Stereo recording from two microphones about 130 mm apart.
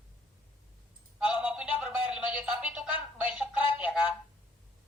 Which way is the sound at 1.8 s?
10° right (ahead or behind).